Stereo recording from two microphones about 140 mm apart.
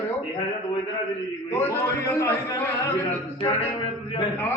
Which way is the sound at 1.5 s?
20° left (ahead or behind).